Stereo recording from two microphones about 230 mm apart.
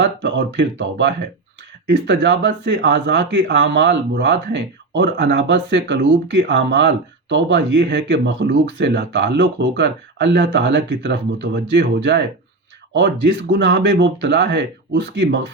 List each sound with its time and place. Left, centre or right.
0.0 s speech: right